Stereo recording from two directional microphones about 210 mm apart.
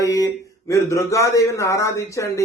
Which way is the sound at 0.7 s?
15° left (ahead or behind).